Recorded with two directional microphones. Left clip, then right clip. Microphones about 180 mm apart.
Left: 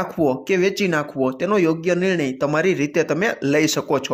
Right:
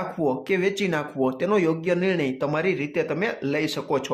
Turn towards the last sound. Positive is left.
turn(degrees=20)  # may be behind; listen again after turning